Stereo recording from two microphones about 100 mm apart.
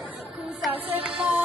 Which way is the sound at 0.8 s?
15° right (ahead or behind).